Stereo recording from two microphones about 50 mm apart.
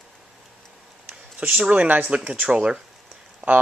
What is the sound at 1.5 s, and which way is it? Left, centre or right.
Speech, right.